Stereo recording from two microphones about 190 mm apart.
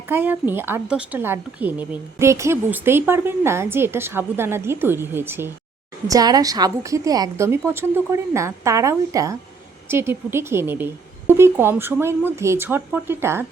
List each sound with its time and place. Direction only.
0.1 s a woman's voice: 10° right (ahead or behind)